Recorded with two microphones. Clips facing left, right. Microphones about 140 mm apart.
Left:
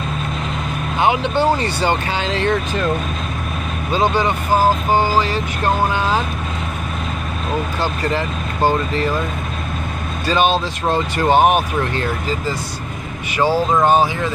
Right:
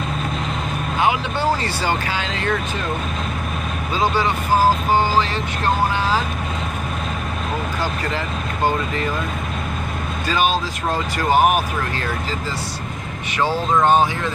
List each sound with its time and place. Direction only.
1.0 s speech: 25° left (ahead or behind)
4.9 s speech: 10° left (ahead or behind)
10.2 s speech: 25° left (ahead or behind)
13.4 s speech: 10° left (ahead or behind)